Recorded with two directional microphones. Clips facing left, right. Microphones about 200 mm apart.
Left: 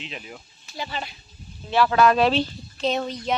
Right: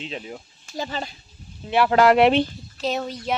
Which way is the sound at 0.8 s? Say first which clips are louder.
Right 3 dB; 45° right (ahead or behind).